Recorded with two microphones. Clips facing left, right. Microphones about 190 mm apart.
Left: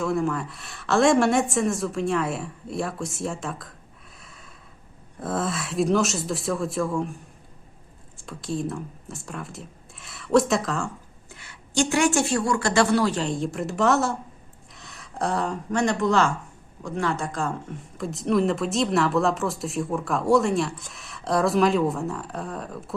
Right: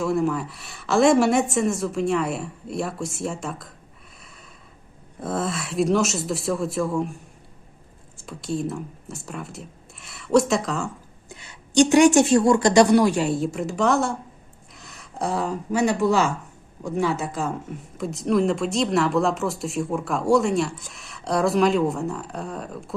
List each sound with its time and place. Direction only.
0.0 s speech: centre (ahead or behind)
4.2 s snort: centre (ahead or behind)
5.2 s speech: centre (ahead or behind)
11.3 s a woman's voice: 20° right (ahead or behind); by 23.0 s centre (ahead or behind)